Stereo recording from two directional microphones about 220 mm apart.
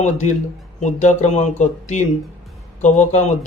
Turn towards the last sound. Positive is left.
turn(degrees=35)  # may be behind; listen again after turning